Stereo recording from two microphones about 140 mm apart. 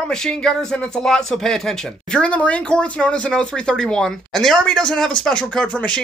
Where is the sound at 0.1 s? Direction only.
5° left (ahead or behind).